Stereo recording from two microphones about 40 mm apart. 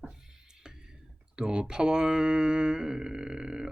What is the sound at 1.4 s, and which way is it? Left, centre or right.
Speech, right.